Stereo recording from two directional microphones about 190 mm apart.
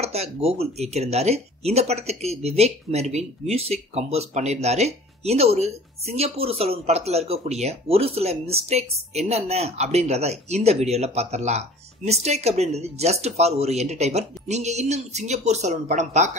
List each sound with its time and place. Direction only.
0.0 s speech: 35° right (ahead or behind)